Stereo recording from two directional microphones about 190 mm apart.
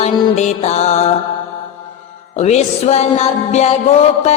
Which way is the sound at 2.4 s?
35° left (ahead or behind).